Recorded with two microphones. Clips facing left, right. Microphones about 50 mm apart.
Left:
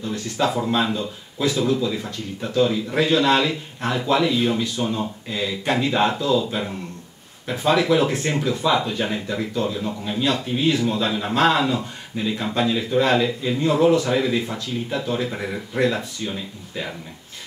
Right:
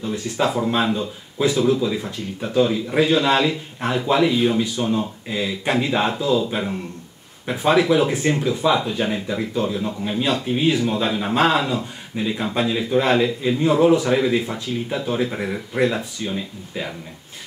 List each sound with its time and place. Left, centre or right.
0.0 s a man's voice: centre
12.1 s speech: right
12.5 s a man's voice: centre